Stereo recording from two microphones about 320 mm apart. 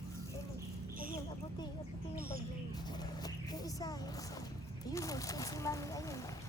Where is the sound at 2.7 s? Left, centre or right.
Centre.